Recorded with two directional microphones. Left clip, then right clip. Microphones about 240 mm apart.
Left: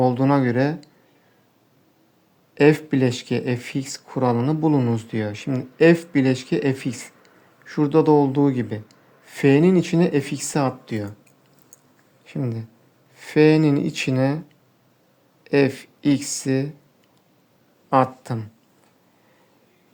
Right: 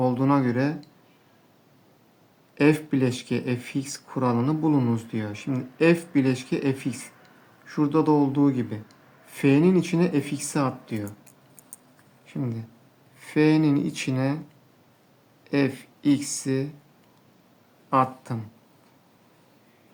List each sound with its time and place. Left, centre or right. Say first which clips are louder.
0.0 s speech: left 4 dB; left
2.6 s speech: left 5 dB; left
12.2 s speech: left 4 dB; left
15.4 s speech: left 6 dB; left
17.9 s speech: left 4 dB; left